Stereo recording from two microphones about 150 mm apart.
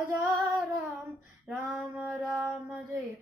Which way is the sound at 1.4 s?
5° right (ahead or behind).